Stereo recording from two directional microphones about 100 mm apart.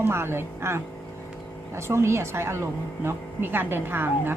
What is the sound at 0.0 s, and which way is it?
Speech, 25° right (ahead or behind).